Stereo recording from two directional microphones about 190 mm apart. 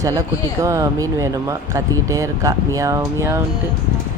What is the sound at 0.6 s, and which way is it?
Speech, 20° right (ahead or behind).